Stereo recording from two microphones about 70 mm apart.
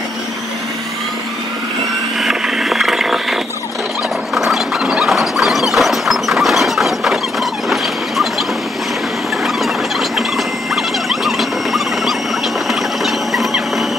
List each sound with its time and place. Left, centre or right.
2.1 s mechanisms: centre
4.4 s squeal: centre
9.6 s a sound: centre